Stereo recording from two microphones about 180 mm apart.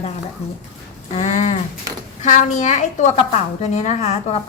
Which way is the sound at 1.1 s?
40° left (ahead or behind).